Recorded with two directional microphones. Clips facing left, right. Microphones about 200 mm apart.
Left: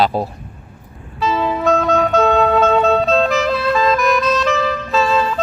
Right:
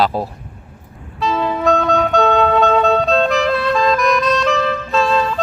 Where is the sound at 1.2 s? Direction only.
Centre (ahead or behind).